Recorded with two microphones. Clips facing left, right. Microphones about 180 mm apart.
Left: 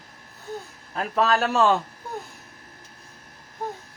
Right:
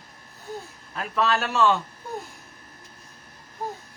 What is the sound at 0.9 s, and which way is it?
Speech, 40° left (ahead or behind).